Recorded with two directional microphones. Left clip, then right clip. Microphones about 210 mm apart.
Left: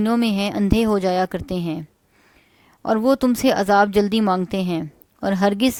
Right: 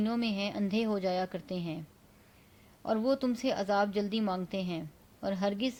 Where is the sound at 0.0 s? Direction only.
50° left (ahead or behind).